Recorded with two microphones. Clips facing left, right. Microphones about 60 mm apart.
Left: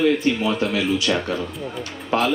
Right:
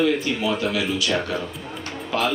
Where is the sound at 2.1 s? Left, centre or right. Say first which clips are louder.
Left 3 dB; left.